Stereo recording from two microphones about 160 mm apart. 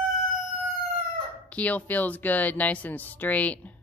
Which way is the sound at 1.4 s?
10° left (ahead or behind).